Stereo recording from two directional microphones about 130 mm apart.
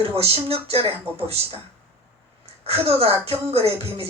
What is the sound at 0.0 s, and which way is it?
Speech, 50° right (ahead or behind).